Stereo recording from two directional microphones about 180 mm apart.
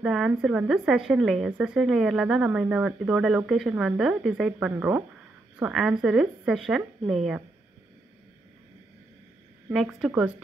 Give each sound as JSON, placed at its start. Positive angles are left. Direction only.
{"t": 0.0, "sound": "a woman's voice", "side_deg": 0}
{"t": 9.7, "sound": "a woman's voice", "side_deg": 0}